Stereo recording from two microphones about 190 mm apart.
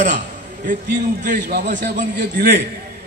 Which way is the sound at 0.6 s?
50° right (ahead or behind).